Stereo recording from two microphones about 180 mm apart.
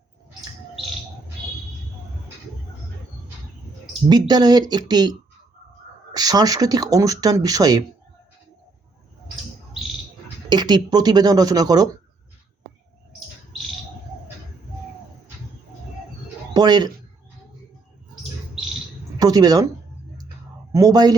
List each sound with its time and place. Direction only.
4.1 s speech: 20° right (ahead or behind)
6.1 s speech: 20° right (ahead or behind)
10.5 s speech: 25° right (ahead or behind)
16.6 s speech: 20° right (ahead or behind)
18.1 s bird: centre (ahead or behind)
19.2 s speech: 20° right (ahead or behind)
20.7 s speech: 20° right (ahead or behind)